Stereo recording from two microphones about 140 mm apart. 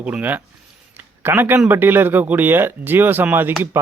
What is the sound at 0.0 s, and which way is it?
A man's voice, 10° right (ahead or behind).